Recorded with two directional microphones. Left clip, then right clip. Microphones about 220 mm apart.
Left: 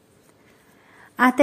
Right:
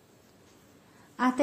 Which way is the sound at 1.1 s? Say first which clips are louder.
Left 10 dB; 35° left (ahead or behind).